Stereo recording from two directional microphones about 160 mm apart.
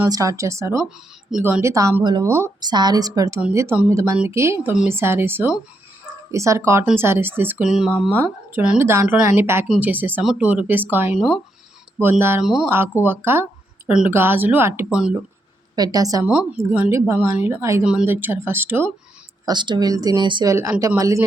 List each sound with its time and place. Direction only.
0.1 s a woman's voice: 20° right (ahead or behind)
0.8 s a woman's voice: 5° right (ahead or behind)
9.6 s speech: centre (ahead or behind)
9.9 s speech: 10° right (ahead or behind)
15.7 s a woman's voice: 25° right (ahead or behind)
16.2 s speech: 10° right (ahead or behind)
19.5 s a woman's voice: 30° right (ahead or behind)